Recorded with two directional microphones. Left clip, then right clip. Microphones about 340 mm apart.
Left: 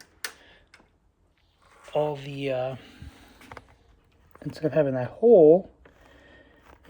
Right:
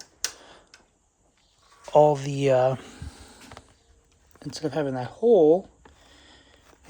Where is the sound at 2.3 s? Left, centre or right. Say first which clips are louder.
Right 8 dB; right.